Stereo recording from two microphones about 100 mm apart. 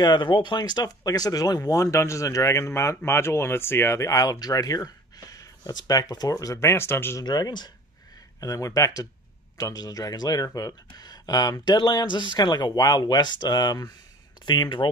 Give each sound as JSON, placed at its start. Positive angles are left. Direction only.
{"t": 0.0, "sound": "speech", "side_deg": 50}
{"t": 7.2, "sound": "speech", "side_deg": 40}